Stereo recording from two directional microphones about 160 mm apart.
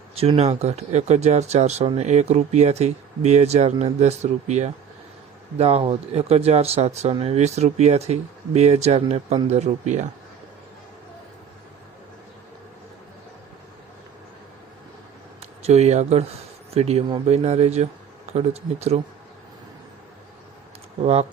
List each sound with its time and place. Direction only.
0.2 s speech: 40° right (ahead or behind)
15.4 s speech: 40° right (ahead or behind)
21.0 s speech: 40° right (ahead or behind)